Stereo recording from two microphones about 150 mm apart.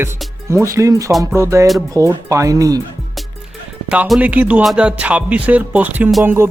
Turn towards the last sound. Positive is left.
turn(degrees=-15)  # may be behind; listen again after turning